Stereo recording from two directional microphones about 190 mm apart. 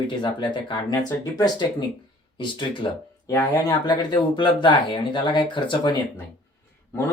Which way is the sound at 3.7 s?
20° left (ahead or behind).